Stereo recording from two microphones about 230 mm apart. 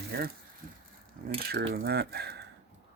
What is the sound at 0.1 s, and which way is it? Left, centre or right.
Speech, right.